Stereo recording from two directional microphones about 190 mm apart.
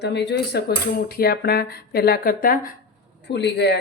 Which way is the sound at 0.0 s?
65° left (ahead or behind).